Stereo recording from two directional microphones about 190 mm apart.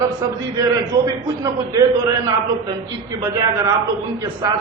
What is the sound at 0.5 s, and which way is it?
A man's voice, 20° right (ahead or behind).